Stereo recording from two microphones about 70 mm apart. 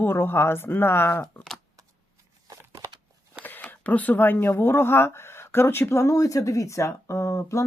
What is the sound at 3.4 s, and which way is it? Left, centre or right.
Speech, left.